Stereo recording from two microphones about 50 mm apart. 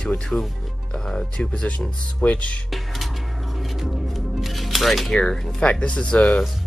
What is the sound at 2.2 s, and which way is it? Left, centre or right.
Speech, left.